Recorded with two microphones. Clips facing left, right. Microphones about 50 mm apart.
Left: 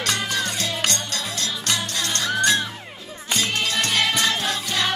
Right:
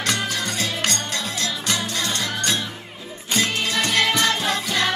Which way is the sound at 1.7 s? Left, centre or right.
Centre.